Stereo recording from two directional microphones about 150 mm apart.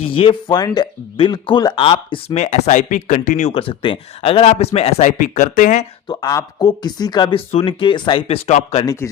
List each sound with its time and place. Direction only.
0.0 s speech: 35° left (ahead or behind); by 3.5 s 55° left (ahead or behind)
3.5 s speech: 35° left (ahead or behind); by 5.8 s 55° left (ahead or behind)
6.1 s speech: 25° left (ahead or behind); by 8.8 s 45° left (ahead or behind)